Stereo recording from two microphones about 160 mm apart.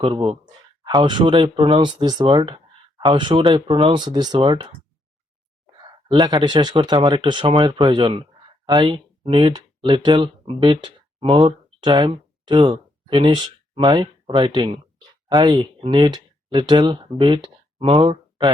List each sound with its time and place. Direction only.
0.0 s speech: 35° right (ahead or behind)
5.8 s speech: 25° right (ahead or behind)